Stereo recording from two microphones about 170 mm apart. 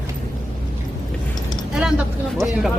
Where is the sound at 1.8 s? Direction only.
5° right (ahead or behind).